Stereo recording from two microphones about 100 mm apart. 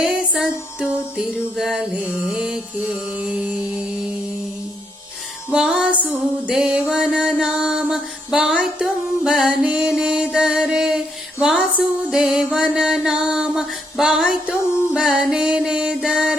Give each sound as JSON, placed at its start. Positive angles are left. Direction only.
{"t": 0.0, "sound": "music", "side_deg": -5}
{"t": 2.0, "sound": "mantra", "side_deg": 25}
{"t": 2.3, "sound": "music", "side_deg": -5}
{"t": 3.2, "sound": "mantra", "side_deg": -10}
{"t": 5.5, "sound": "music", "side_deg": -10}
{"t": 12.1, "sound": "mantra", "side_deg": -5}
{"t": 14.9, "sound": "music", "side_deg": -10}